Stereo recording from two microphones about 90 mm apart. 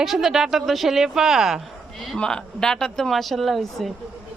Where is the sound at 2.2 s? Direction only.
5° left (ahead or behind).